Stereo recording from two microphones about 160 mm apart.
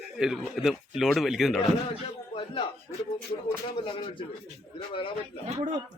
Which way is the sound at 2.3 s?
30° left (ahead or behind).